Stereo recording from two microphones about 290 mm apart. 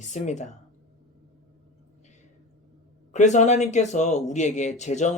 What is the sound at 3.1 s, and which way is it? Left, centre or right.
Speech, left.